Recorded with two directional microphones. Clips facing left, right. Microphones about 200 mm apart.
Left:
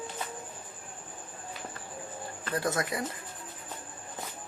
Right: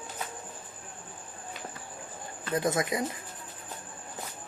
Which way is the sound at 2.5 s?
20° right (ahead or behind).